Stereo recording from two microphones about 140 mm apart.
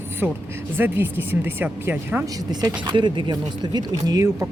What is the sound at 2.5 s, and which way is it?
Speech, 30° right (ahead or behind).